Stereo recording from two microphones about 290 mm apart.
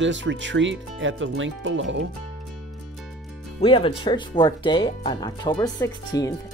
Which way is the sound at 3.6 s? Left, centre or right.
Centre.